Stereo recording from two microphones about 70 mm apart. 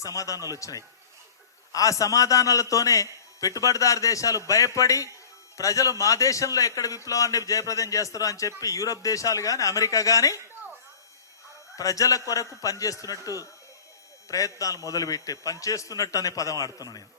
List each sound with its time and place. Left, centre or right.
0.0 s a man's voice: left
11.8 s a man's voice: left